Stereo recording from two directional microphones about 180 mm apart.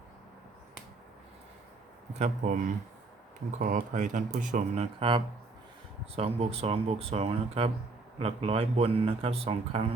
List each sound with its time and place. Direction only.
2.1 s speech: 45° right (ahead or behind)